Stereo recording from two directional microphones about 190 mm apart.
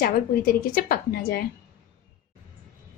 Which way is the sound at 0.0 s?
50° left (ahead or behind).